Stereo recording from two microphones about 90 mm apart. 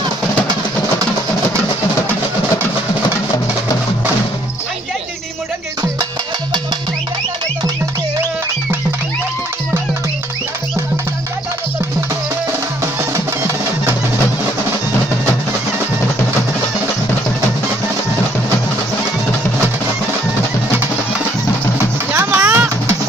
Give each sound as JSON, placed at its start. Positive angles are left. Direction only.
{"t": 13.1, "sound": "music", "side_deg": -30}
{"t": 22.1, "sound": "music", "side_deg": -25}